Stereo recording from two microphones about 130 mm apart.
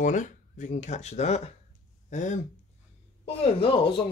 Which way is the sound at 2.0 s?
70° left (ahead or behind).